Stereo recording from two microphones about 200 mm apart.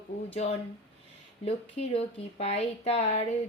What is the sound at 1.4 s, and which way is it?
Speech, 30° left (ahead or behind).